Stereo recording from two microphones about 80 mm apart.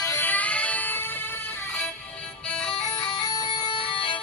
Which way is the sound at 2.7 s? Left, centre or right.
Left.